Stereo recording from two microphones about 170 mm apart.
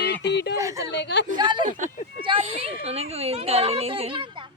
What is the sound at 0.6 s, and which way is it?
Speech, 20° right (ahead or behind).